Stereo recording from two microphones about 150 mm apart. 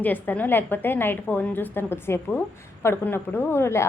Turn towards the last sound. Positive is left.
turn(degrees=15)  # may be behind; listen again after turning